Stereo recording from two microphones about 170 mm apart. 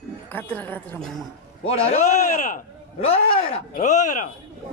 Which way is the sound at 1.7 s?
40° left (ahead or behind).